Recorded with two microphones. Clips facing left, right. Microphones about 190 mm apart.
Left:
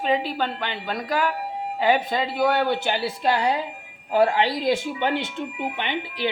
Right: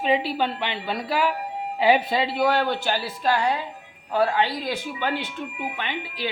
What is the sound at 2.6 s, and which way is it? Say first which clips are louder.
Speech: left 1 dB; 15° left (ahead or behind).